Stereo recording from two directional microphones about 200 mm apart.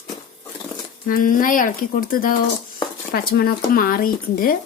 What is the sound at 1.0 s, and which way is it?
Speech, 45° left (ahead or behind).